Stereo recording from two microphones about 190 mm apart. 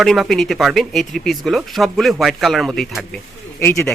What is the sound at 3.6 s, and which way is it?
Speech, 10° left (ahead or behind).